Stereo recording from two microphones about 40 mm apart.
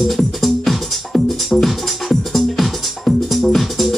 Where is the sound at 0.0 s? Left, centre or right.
Centre.